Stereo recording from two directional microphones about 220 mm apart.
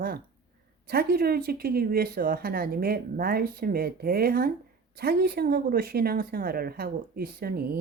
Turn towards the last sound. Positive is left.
turn(degrees=-45)  # may be behind; listen again after turning